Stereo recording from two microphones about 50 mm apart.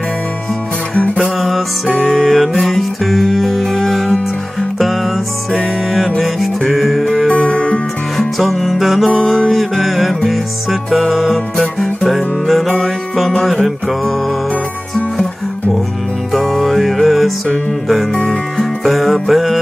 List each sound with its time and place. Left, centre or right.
0.9 s music: left
1.2 s music: centre
5.9 s music: centre
7.2 s music: left
8.4 s music: centre
16.3 s music: centre
18.1 s music: centre
18.6 s music: centre